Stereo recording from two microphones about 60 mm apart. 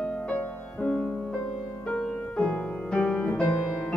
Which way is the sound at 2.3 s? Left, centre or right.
Centre.